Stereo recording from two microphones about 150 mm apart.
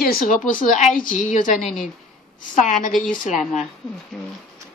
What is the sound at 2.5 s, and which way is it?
A woman's voice, 55° left (ahead or behind).